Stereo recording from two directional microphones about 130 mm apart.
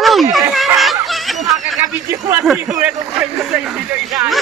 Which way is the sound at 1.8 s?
20° right (ahead or behind).